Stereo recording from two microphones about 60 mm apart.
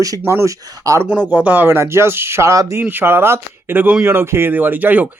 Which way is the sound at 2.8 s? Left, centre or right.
Right.